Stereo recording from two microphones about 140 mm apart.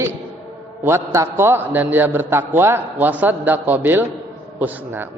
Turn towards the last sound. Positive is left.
turn(degrees=-15)  # may be behind; listen again after turning